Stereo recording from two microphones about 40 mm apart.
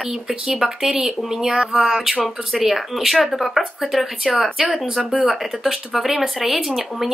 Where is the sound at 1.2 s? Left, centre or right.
Centre.